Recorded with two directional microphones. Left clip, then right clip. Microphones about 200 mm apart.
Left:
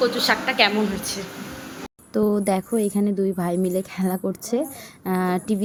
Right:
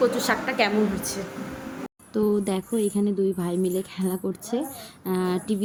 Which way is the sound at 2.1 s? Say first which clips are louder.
Left 3 dB; 15° left (ahead or behind).